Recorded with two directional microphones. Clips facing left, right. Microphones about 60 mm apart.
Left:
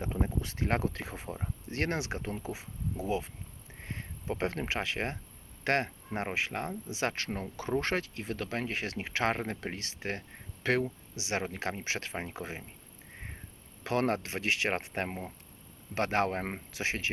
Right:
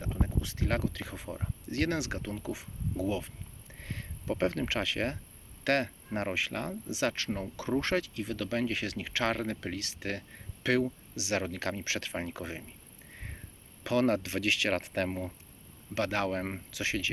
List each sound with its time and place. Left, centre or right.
0.1 s speech: left
13.8 s speech: left
16.0 s speech: left